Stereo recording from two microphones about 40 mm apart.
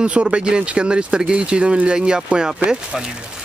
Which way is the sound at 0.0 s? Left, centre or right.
Right.